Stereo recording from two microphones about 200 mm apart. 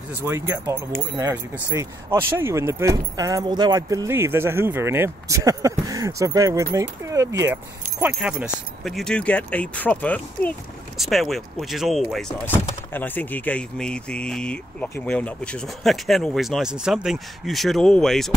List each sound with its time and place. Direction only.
0.1 s speech: 10° right (ahead or behind)